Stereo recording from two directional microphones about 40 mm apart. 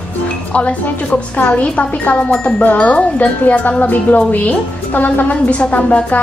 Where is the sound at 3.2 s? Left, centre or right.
Left.